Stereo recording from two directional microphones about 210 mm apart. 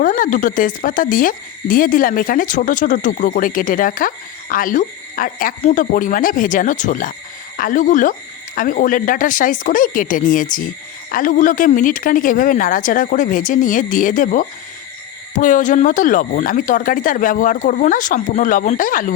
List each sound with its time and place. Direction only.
0.0 s speech: 40° left (ahead or behind)